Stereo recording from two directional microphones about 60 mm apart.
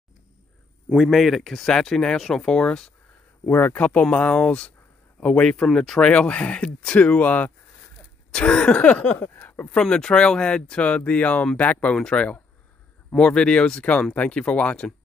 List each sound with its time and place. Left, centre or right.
0.9 s speech: centre
3.5 s speech: left
8.3 s speech: centre
9.2 s a woman's voice: left
9.7 s speech: centre